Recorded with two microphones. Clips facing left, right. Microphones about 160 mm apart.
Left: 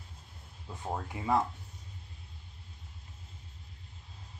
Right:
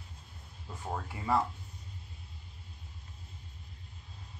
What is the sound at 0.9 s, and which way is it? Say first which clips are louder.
Speech: left 1 dB; 15° left (ahead or behind).